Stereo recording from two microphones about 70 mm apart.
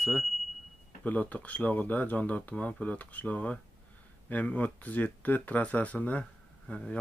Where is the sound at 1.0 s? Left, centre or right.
Left.